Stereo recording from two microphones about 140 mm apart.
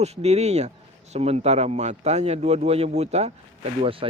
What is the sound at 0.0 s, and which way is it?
A man's voice, 50° right (ahead or behind).